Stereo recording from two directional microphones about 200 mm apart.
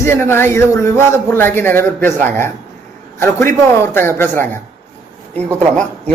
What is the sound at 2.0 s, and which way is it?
Speech, 40° right (ahead or behind).